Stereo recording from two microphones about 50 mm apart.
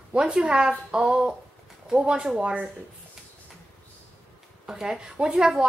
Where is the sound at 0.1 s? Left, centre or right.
Centre.